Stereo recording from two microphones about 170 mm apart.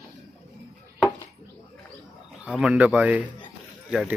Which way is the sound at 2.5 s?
5° right (ahead or behind).